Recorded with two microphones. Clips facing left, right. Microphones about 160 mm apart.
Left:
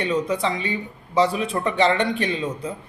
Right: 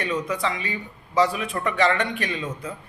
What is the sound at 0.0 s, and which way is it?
A man's voice, 30° left (ahead or behind).